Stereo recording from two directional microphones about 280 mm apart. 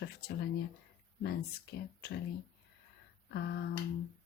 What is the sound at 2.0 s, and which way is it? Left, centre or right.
Speech, left.